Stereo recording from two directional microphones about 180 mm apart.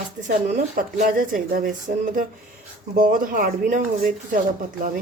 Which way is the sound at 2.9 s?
50° right (ahead or behind).